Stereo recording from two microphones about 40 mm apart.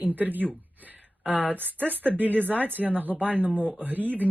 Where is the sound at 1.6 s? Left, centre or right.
Right.